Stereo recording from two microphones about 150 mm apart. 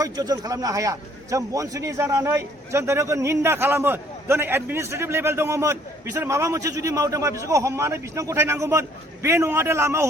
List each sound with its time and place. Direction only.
0.0 s a man's voice: 25° right (ahead or behind)